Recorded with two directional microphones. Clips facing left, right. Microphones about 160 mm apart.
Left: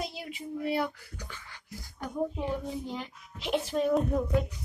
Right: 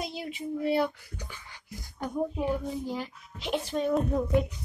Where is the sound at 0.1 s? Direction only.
25° right (ahead or behind).